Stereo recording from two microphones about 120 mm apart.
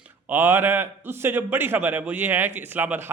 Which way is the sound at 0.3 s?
20° right (ahead or behind).